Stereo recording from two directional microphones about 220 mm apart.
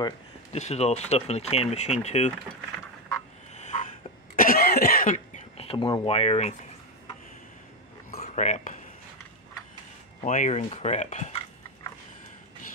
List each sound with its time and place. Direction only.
0.5 s speech: 30° left (ahead or behind)
3.5 s a sound: 35° left (ahead or behind)
4.4 s speech: 40° left (ahead or behind)
8.1 s dishes: 35° left (ahead or behind)
10.2 s speech: 35° left (ahead or behind)